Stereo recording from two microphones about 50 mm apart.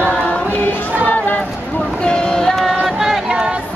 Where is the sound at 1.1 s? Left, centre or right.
Left.